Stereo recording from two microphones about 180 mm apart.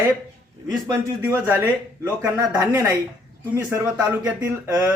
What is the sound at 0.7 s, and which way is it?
Speech, 15° right (ahead or behind).